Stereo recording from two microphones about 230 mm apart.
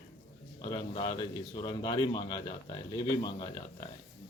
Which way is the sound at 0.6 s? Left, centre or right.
Centre.